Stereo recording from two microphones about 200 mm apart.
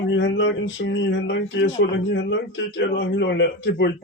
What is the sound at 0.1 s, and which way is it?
Speech, 65° left (ahead or behind).